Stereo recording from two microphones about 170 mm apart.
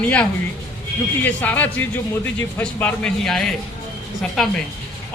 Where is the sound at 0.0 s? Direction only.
10° left (ahead or behind).